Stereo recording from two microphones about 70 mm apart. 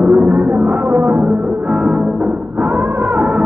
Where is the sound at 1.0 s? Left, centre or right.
Right.